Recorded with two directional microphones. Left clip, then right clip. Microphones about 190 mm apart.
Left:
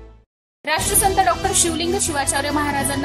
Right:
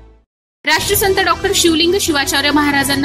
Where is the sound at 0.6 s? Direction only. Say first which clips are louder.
Right 6 dB; 5° right (ahead or behind).